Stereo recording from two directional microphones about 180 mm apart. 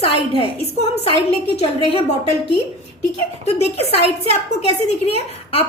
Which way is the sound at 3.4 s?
35° left (ahead or behind).